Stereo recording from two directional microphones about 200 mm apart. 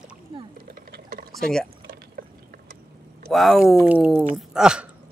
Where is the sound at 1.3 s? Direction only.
5° left (ahead or behind).